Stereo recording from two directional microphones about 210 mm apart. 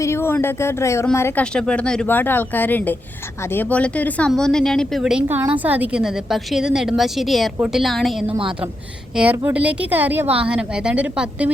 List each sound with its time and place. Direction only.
0.0 s a woman's voice: 10° left (ahead or behind)
8.3 s a woman's voice: 25° right (ahead or behind)
9.1 s a woman's voice: 10° right (ahead or behind)